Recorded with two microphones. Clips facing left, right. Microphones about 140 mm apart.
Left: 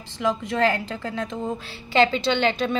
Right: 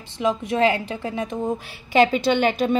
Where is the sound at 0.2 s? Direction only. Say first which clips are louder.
Right 2 dB; 20° right (ahead or behind).